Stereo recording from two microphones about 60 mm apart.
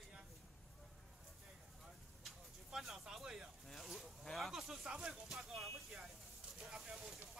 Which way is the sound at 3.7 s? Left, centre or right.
Centre.